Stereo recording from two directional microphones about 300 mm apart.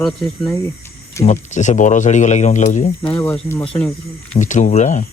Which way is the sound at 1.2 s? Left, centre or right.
Left.